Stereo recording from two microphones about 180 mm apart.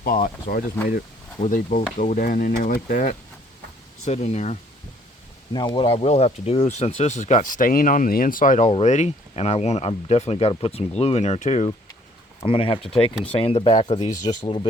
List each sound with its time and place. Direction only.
0.0 s speech: 50° left (ahead or behind)
5.5 s speech: 25° left (ahead or behind)
12.5 s speech: 30° left (ahead or behind)